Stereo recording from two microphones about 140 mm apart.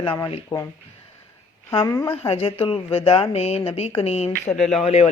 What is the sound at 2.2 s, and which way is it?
Speech, 40° left (ahead or behind).